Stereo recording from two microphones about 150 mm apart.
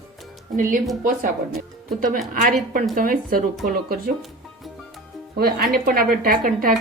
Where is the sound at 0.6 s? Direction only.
65° right (ahead or behind).